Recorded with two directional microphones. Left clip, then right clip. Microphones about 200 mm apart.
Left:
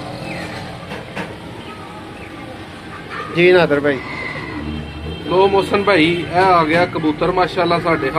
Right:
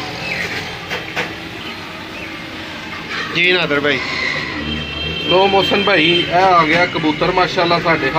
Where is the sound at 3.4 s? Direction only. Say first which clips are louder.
Left 2 dB; 30° left (ahead or behind).